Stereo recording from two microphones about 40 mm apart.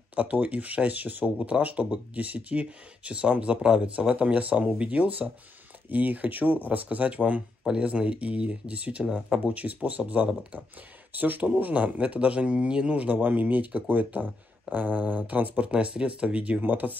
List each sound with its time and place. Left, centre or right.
0.1 s speech: right
11.1 s speech: right
11.5 s speech: right
15.6 s speech: right
16.6 s speech: right